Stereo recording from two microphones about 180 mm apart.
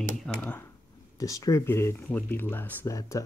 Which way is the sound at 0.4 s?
10° left (ahead or behind).